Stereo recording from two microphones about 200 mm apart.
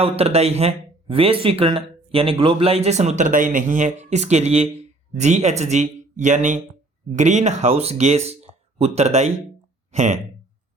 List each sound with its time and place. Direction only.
0.0 s speech: 30° right (ahead or behind)